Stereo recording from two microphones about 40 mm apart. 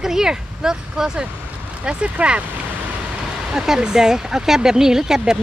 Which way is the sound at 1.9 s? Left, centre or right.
Right.